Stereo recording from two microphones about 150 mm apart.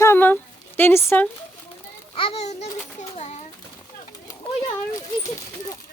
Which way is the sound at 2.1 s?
40° left (ahead or behind).